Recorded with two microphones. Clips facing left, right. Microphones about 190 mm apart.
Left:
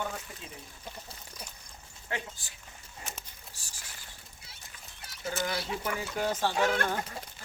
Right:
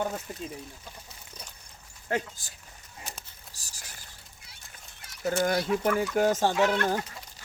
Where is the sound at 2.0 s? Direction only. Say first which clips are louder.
Right 7 dB; 40° right (ahead or behind).